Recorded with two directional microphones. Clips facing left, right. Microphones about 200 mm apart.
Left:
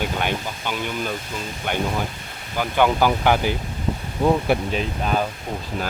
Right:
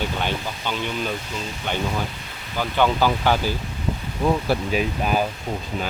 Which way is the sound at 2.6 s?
15° left (ahead or behind).